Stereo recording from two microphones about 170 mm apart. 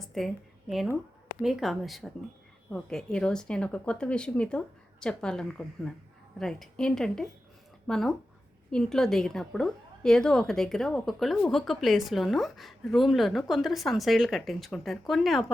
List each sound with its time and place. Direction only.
0.2 s a woman's voice: centre (ahead or behind)
1.4 s a woman's voice: centre (ahead or behind)